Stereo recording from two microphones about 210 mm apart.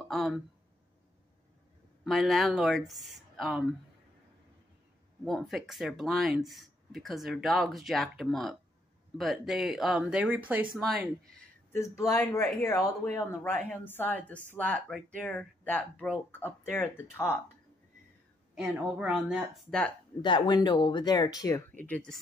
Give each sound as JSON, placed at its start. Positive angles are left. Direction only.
{"t": 2.0, "sound": "speech", "side_deg": 0}
{"t": 5.2, "sound": "speech", "side_deg": 0}
{"t": 11.7, "sound": "a woman's voice", "side_deg": 15}
{"t": 18.5, "sound": "speech", "side_deg": -5}
{"t": 20.2, "sound": "speech", "side_deg": 20}
{"t": 21.8, "sound": "speech", "side_deg": 5}